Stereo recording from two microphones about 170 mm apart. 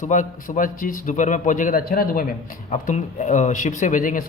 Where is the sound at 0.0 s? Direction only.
45° left (ahead or behind).